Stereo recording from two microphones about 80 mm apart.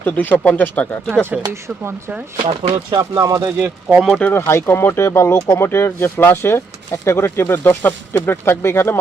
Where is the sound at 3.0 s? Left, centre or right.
Right.